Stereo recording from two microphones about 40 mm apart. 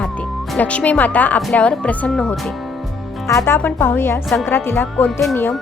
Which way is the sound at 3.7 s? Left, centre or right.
Left.